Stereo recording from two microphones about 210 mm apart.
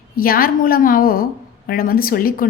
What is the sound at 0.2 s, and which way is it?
A woman's voice, 45° left (ahead or behind).